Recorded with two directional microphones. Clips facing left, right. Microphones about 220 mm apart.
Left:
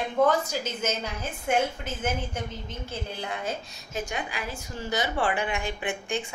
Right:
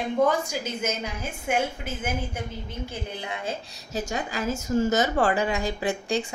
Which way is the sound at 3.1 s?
20° right (ahead or behind).